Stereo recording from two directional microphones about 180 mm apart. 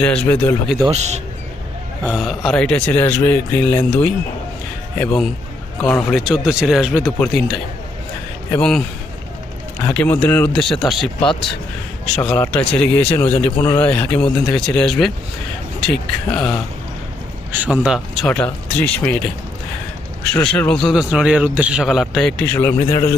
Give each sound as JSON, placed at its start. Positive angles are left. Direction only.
{"t": 0.0, "sound": "speech", "side_deg": 5}
{"t": 0.9, "sound": "speech", "side_deg": -40}
{"t": 2.0, "sound": "a man's voice", "side_deg": 0}
{"t": 4.9, "sound": "a man's voice", "side_deg": 0}
{"t": 8.5, "sound": "a man's voice", "side_deg": 5}
{"t": 9.9, "sound": "a man's voice", "side_deg": 10}
{"t": 17.5, "sound": "a man's voice", "side_deg": -5}
{"t": 20.3, "sound": "a man's voice", "side_deg": 5}
{"t": 22.5, "sound": "speech", "side_deg": 15}